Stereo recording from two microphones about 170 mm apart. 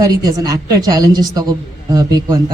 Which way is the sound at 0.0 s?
20° right (ahead or behind).